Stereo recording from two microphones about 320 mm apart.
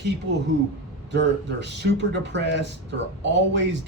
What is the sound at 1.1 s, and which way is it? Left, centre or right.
Speech, right.